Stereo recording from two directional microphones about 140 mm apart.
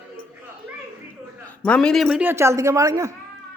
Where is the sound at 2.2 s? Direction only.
15° right (ahead or behind).